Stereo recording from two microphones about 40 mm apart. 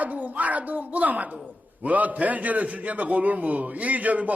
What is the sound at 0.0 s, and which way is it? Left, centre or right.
Speech, right.